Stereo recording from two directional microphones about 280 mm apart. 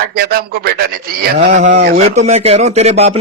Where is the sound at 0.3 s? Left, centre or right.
Right.